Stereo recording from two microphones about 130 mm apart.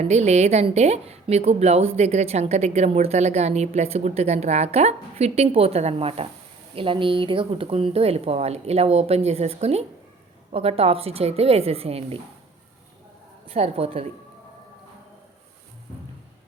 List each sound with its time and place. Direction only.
0.0 s a woman's voice: 60° right (ahead or behind)
13.4 s speech: 50° right (ahead or behind)